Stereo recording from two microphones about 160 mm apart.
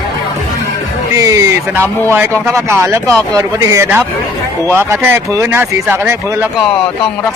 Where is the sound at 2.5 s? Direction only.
15° right (ahead or behind).